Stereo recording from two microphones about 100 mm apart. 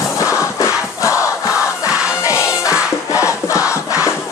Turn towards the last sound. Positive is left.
turn(degrees=30)  # may be behind; listen again after turning